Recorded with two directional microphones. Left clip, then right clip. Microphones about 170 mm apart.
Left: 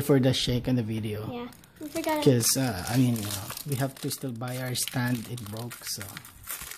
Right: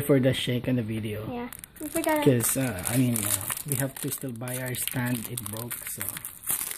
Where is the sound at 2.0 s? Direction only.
25° right (ahead or behind).